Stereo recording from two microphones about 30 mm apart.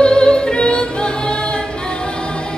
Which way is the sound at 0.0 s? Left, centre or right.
Left.